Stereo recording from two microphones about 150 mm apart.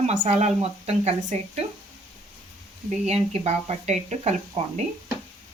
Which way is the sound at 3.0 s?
45° right (ahead or behind).